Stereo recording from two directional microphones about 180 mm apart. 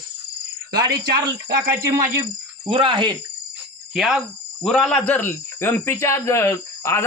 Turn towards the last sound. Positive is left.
turn(degrees=15)  # may be behind; listen again after turning